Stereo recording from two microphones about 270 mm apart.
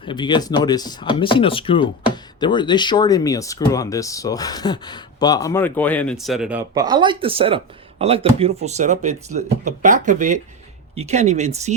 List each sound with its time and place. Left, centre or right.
0.0 s speech: centre; by 11.7 s right